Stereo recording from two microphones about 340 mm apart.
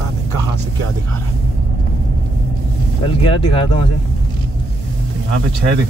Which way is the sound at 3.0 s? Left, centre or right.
Centre.